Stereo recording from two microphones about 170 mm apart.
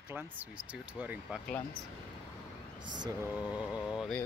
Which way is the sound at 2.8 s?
25° right (ahead or behind).